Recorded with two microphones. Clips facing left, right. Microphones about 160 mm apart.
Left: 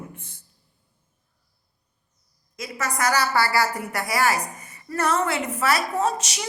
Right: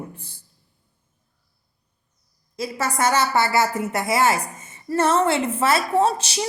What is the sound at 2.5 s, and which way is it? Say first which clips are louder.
A woman's voice: right 4 dB; 30° right (ahead or behind).